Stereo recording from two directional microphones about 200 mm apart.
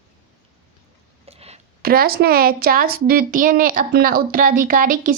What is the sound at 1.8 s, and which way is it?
Speech, 50° right (ahead or behind).